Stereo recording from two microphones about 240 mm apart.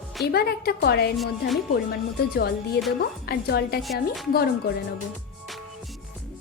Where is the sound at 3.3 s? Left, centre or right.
Left.